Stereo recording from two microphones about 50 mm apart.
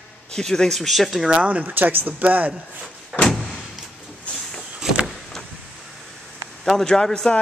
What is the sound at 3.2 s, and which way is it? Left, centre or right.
Door, centre.